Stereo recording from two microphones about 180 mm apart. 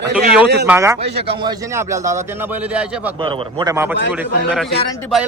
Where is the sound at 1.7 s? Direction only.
15° right (ahead or behind).